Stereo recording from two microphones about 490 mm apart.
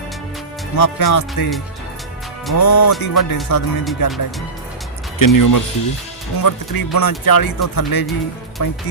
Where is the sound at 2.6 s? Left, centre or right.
Left.